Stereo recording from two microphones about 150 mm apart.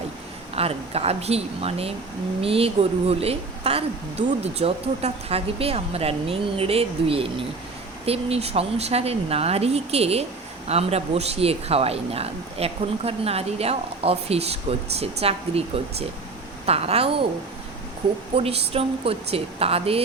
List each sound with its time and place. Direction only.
0.5 s speech: 40° right (ahead or behind)
18.3 s speech: 40° right (ahead or behind)